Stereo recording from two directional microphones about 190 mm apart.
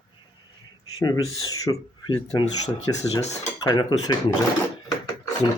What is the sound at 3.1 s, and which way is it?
Dishes, 35° left (ahead or behind).